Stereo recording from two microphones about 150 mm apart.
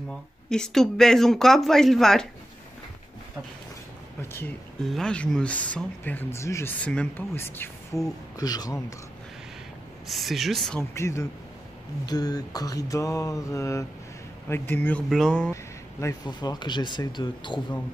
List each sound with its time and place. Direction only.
0.5 s speech: 5° left (ahead or behind)
4.2 s speech: 15° left (ahead or behind)
4.8 s speech: 5° left (ahead or behind)
8.4 s speech: 25° left (ahead or behind)
10.0 s speech: centre (ahead or behind)
10.8 s speech: 20° left (ahead or behind)
15.5 s speech: 20° left (ahead or behind)